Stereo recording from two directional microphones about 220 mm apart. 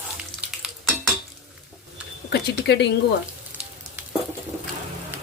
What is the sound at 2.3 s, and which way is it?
Speech, 50° left (ahead or behind).